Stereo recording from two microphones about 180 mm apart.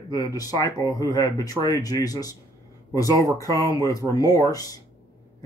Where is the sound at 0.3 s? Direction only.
20° left (ahead or behind).